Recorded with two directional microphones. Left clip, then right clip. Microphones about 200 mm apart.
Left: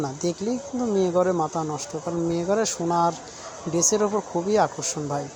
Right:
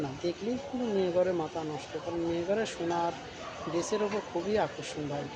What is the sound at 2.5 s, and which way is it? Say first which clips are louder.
Speech: left 8 dB; 35° left (ahead or behind).